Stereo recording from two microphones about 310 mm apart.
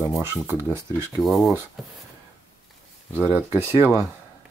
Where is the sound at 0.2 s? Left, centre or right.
Centre.